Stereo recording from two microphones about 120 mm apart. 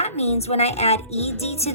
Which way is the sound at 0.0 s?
60° left (ahead or behind).